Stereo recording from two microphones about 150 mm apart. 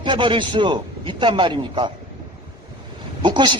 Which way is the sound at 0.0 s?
30° right (ahead or behind).